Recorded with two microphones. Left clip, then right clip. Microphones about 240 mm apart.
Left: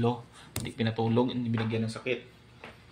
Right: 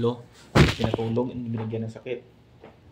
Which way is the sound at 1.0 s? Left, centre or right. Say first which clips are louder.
Even; centre.